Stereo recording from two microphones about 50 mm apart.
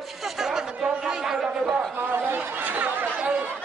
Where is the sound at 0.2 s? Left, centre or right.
Centre.